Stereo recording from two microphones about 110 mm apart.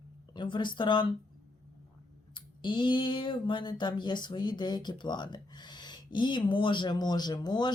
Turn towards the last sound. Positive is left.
turn(degrees=40)  # may be behind; listen again after turning